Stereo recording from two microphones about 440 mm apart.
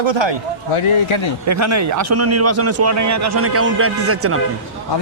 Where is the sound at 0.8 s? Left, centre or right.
Left.